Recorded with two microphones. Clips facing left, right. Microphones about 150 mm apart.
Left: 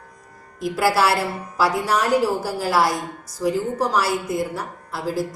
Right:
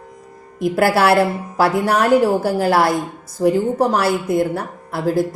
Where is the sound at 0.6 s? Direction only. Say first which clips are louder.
Right 4 dB; 60° right (ahead or behind).